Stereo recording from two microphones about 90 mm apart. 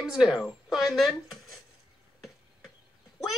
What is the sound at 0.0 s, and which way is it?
Speech, 5° right (ahead or behind).